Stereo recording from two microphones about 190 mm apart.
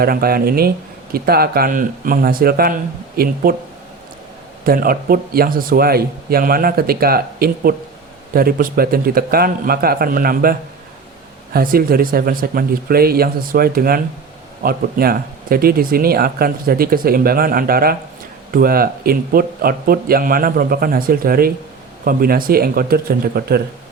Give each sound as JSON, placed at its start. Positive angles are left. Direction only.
{"t": 0.0, "sound": "speech", "side_deg": -50}
{"t": 4.6, "sound": "speech", "side_deg": -50}